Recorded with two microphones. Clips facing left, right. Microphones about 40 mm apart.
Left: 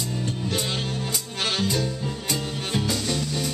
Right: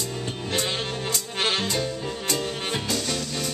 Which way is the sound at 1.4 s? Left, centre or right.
Right.